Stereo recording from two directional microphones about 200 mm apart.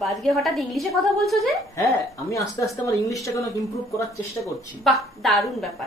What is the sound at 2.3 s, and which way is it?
Speech, 15° left (ahead or behind).